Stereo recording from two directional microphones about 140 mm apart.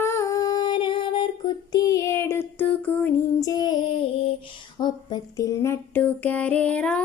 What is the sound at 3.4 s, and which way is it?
Child singing, 25° left (ahead or behind).